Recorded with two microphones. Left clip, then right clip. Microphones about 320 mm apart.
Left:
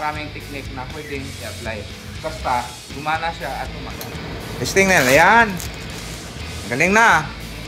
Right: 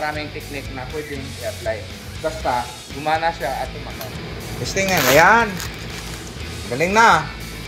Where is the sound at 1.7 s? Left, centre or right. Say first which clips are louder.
Right 4 dB; left.